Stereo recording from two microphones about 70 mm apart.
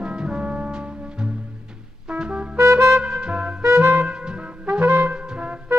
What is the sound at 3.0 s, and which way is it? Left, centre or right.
Music, centre.